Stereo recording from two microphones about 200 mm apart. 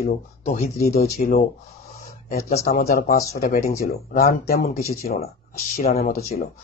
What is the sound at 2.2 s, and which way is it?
Speech, 50° left (ahead or behind).